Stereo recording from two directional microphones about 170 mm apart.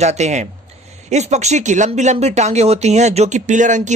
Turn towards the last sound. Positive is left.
turn(degrees=-45)  # may be behind; listen again after turning